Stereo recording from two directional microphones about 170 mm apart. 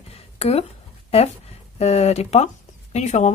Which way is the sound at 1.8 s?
40° left (ahead or behind).